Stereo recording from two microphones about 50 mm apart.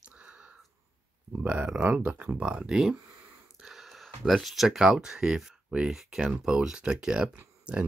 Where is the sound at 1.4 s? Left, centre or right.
Right.